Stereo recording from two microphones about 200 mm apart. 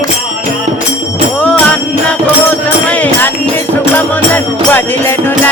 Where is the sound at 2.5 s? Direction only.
5° left (ahead or behind).